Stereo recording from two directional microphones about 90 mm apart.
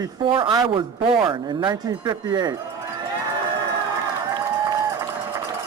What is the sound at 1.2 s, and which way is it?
Speech, 60° right (ahead or behind).